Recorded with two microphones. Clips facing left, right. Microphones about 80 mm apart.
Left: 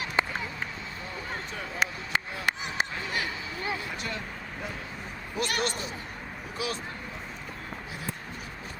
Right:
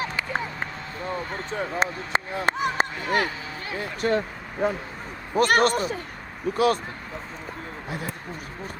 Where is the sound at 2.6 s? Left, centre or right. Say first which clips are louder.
Right 7 dB; right.